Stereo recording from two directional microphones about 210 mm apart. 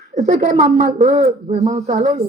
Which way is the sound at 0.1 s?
30° right (ahead or behind).